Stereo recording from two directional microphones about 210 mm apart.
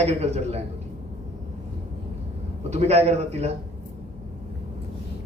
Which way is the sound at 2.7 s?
30° right (ahead or behind).